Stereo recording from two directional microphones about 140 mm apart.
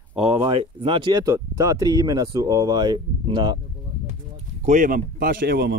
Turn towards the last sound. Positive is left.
turn(degrees=-90)